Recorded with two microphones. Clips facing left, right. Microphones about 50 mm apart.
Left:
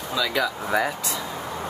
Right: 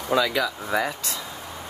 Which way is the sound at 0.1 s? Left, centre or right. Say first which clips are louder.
Right 4 dB; right.